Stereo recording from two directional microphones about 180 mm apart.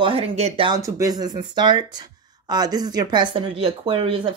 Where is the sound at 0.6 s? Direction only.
20° right (ahead or behind).